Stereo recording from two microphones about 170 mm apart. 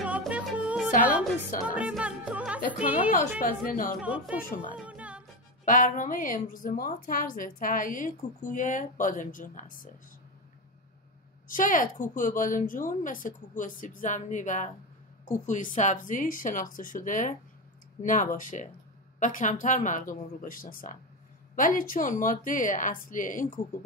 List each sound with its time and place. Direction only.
0.0 s music: 5° right (ahead or behind)
3.1 s a woman's voice: 50° left (ahead or behind)
4.0 s speech: 5° right (ahead or behind)
4.4 s a woman's voice: 55° left (ahead or behind)
4.7 s music: 10° right (ahead or behind)
5.7 s a woman's voice: 50° left (ahead or behind)
11.4 s a woman's voice: 50° left (ahead or behind)